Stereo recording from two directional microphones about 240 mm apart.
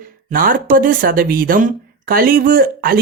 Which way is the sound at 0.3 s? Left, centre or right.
Right.